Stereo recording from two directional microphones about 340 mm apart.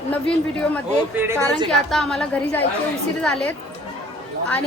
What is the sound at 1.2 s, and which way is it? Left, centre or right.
A woman's voice, centre.